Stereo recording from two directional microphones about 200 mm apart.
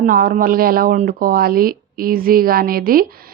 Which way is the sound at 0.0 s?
45° right (ahead or behind).